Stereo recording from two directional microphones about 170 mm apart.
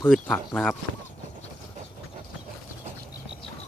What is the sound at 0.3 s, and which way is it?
Speech, 5° left (ahead or behind).